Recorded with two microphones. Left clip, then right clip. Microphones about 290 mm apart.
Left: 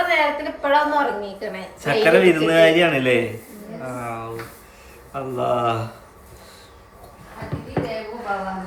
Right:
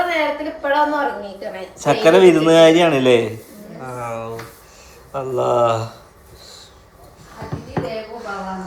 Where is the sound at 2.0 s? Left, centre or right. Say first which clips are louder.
Right 5 dB; centre.